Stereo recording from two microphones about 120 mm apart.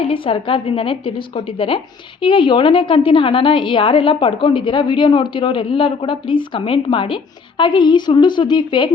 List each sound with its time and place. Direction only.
0.0 s a woman's voice: 50° left (ahead or behind)